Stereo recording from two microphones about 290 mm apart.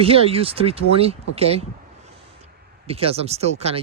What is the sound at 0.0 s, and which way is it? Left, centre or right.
Speech, centre.